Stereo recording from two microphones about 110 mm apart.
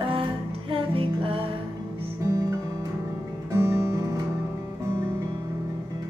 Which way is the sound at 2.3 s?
30° right (ahead or behind).